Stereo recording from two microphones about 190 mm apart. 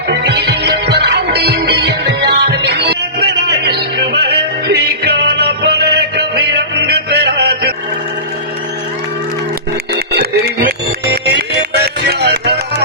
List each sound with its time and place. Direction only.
0.1 s music: 65° right (ahead or behind)
10.1 s a sound: 60° right (ahead or behind)
11.1 s music: 60° right (ahead or behind)